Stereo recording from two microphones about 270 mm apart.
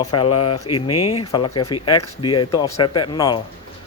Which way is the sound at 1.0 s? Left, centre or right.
Left.